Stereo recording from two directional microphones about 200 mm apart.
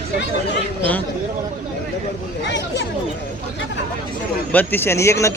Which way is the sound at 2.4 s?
60° left (ahead or behind).